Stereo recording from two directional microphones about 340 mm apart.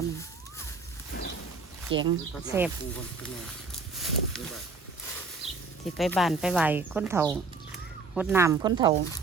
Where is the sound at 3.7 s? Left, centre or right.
Centre.